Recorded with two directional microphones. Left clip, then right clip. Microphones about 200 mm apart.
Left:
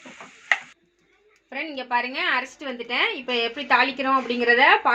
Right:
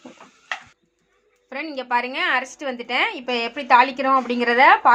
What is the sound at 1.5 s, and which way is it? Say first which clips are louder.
A woman's voice: right 3 dB; 40° right (ahead or behind).